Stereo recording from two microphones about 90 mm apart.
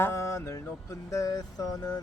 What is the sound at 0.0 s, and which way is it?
Music, 35° left (ahead or behind).